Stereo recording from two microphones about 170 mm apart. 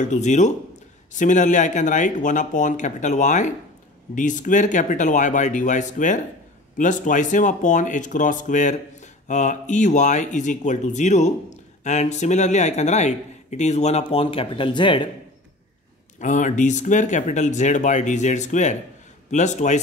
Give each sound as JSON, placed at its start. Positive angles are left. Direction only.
{"t": 0.0, "sound": "speech", "side_deg": 45}
{"t": 16.2, "sound": "speech", "side_deg": 45}